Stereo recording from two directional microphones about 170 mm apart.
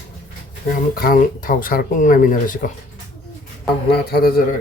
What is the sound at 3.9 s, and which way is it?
Speech, 65° left (ahead or behind).